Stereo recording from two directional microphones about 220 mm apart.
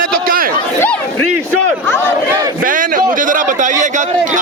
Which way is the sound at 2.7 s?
40° right (ahead or behind).